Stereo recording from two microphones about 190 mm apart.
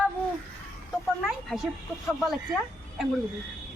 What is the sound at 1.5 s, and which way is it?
Speech, centre (ahead or behind).